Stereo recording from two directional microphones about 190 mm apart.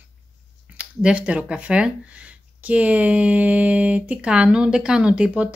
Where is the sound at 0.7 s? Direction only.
5° right (ahead or behind).